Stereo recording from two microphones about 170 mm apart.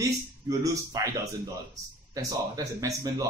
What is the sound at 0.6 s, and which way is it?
Speech, 20° right (ahead or behind).